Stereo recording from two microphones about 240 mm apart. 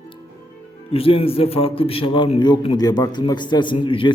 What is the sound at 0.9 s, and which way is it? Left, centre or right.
A man's voice, left.